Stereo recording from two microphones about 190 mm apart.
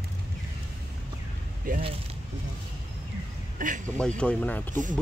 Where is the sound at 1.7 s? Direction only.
45° right (ahead or behind).